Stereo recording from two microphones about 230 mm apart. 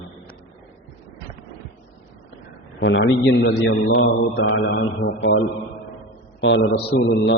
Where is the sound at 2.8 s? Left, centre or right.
Left.